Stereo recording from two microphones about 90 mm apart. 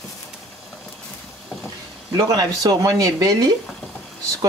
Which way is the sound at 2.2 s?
40° right (ahead or behind).